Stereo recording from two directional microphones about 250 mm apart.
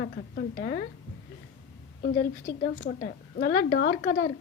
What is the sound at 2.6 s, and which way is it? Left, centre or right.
A woman's voice, left.